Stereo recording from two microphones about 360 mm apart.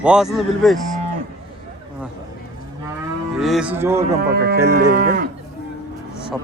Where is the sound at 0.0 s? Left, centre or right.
Centre.